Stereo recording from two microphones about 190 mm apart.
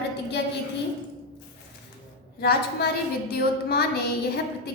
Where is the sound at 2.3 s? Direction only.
55° left (ahead or behind).